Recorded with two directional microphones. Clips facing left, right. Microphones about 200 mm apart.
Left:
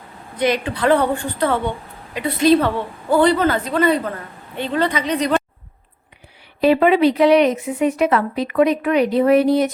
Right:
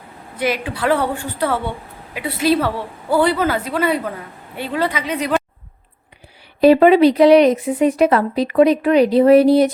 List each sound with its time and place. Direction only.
0.3 s a woman's voice: 5° right (ahead or behind)
6.6 s a woman's voice: 40° right (ahead or behind)